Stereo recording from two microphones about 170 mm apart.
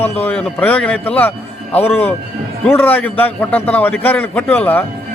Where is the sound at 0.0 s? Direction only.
10° left (ahead or behind).